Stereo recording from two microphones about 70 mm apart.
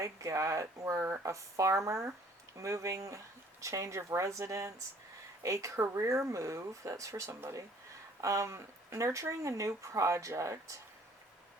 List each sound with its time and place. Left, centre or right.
0.0 s speech: right
0.9 s speech: right
1.2 s speech: right